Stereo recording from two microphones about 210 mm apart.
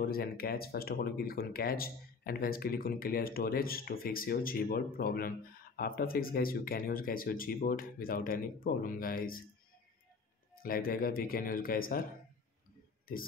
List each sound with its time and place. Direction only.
0.0 s speech: 45° left (ahead or behind)
10.6 s speech: 45° left (ahead or behind)